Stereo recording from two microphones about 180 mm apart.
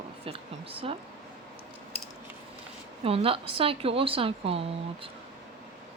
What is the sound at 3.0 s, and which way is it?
Speech, 30° right (ahead or behind).